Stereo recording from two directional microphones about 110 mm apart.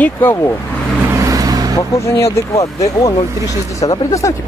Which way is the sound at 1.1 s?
30° right (ahead or behind).